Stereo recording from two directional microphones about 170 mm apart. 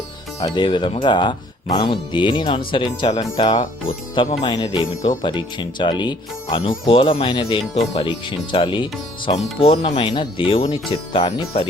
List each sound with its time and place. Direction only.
0.4 s speech: 25° left (ahead or behind)